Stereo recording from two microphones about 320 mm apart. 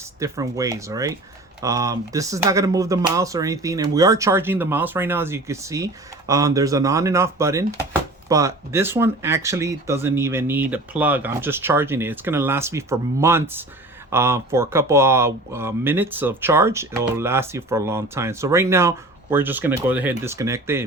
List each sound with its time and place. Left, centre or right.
0.2 s speech: centre